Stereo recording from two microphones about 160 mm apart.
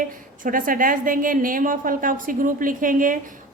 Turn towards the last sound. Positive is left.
turn(degrees=-55)  # may be behind; listen again after turning